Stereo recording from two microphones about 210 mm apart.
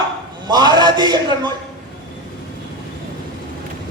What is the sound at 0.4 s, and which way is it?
Speech, 20° right (ahead or behind).